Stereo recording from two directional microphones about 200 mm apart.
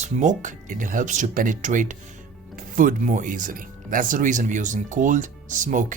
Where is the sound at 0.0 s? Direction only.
35° right (ahead or behind).